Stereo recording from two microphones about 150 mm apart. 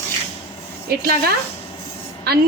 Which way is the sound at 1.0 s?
85° right.